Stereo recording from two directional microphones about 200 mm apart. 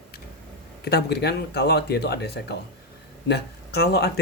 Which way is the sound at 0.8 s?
55° left (ahead or behind).